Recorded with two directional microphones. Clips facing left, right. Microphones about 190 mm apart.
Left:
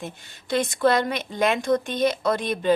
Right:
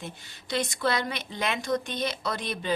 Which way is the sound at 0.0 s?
50° left (ahead or behind).